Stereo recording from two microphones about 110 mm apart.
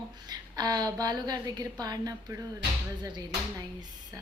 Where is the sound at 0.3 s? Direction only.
40° right (ahead or behind).